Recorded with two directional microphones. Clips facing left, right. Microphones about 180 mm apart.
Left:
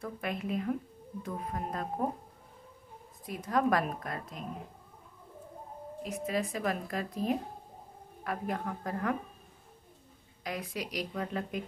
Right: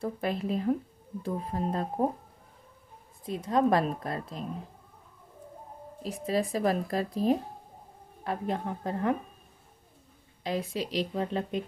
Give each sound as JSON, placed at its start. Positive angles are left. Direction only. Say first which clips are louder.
{"t": 0.0, "sound": "a woman's voice", "louder": "right 5 dB", "side_deg": -30}
{"t": 3.3, "sound": "a woman's voice", "louder": "right 4 dB", "side_deg": -25}
{"t": 6.0, "sound": "a woman's voice", "louder": "right 4 dB", "side_deg": -30}
{"t": 10.4, "sound": "a woman's voice", "louder": "right 6 dB", "side_deg": -25}